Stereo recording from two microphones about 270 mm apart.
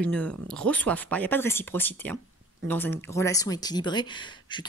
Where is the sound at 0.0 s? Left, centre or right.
Centre.